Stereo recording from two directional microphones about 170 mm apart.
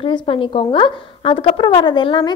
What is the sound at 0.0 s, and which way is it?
A woman's voice, 30° left (ahead or behind).